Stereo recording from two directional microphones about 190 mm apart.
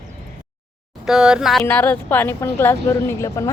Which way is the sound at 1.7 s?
10° left (ahead or behind).